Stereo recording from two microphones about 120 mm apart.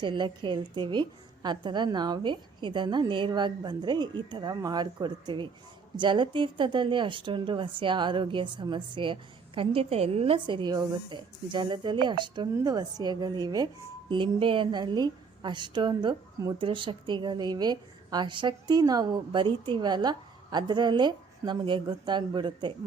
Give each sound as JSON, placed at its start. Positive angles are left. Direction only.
{"t": 0.0, "sound": "a woman's voice", "side_deg": -40}
{"t": 9.6, "sound": "a woman's voice", "side_deg": -55}
{"t": 14.1, "sound": "a woman's voice", "side_deg": -45}